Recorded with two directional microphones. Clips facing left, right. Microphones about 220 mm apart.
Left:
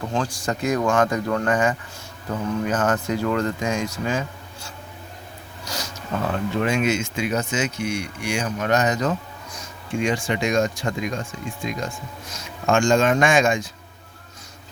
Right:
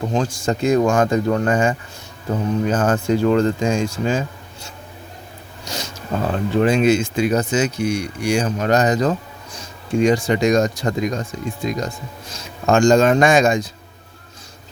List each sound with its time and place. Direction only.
0.1 s speech: 25° right (ahead or behind)